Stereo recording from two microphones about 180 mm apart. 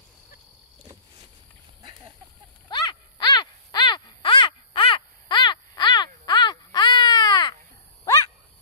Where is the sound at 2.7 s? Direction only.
25° left (ahead or behind).